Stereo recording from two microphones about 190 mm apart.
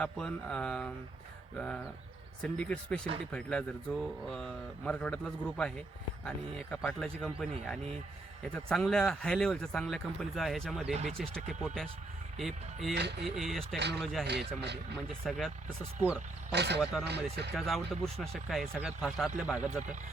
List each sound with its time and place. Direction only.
0.0 s speech: 5° left (ahead or behind)
8.5 s speech: 5° left (ahead or behind)
12.9 s speech: 60° right (ahead or behind)
13.2 s speech: centre (ahead or behind)
13.7 s speech: 60° right (ahead or behind)
14.0 s speech: centre (ahead or behind)
14.3 s speech: 60° right (ahead or behind)
15.2 s speech: centre (ahead or behind)
16.5 s speech: 60° right (ahead or behind)
17.5 s speech: centre (ahead or behind)